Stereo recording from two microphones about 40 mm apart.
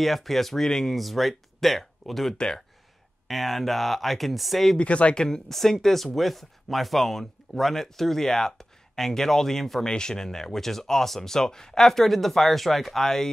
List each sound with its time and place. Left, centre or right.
0.0 s speech: centre
0.9 s speech: centre
2.3 s speech: centre
3.3 s speech: centre
4.7 s speech: left
5.5 s speech: centre
9.8 s speech: centre